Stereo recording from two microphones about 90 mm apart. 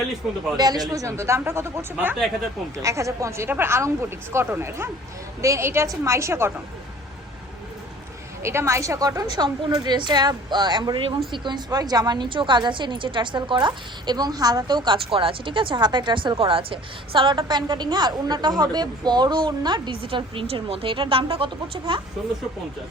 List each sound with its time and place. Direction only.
0.5 s a woman's voice: 45° right (ahead or behind); by 6.5 s 30° right (ahead or behind)
8.4 s a woman's voice: 30° right (ahead or behind); by 14.9 s 50° right (ahead or behind)
14.9 s a woman's voice: 85° right; by 22.0 s 70° right (ahead or behind)